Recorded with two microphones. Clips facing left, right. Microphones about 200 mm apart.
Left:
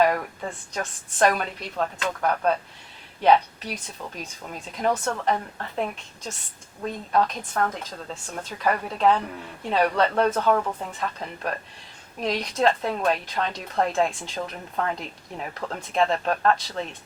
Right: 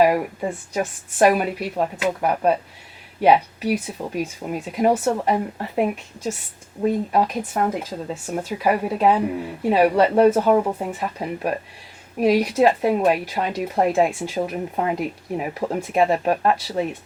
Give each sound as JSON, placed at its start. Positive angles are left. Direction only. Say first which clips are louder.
{"t": 0.0, "sound": "speech", "louder": "right 4 dB", "side_deg": -10}